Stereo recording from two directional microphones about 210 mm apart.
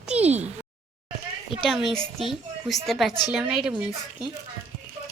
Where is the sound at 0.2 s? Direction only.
30° right (ahead or behind).